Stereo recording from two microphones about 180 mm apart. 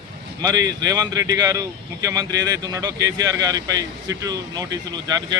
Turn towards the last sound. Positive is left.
turn(degrees=-20)  # may be behind; listen again after turning